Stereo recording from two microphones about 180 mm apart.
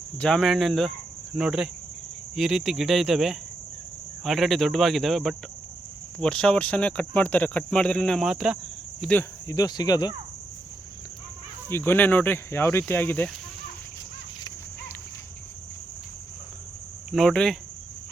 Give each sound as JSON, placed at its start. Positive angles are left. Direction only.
{"t": 0.2, "sound": "speech", "side_deg": 5}
{"t": 9.5, "sound": "speech", "side_deg": 20}
{"t": 11.7, "sound": "speech", "side_deg": 10}
{"t": 17.1, "sound": "speech", "side_deg": 0}